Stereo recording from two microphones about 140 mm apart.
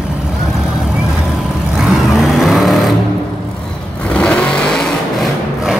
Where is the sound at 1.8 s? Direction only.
Centre (ahead or behind).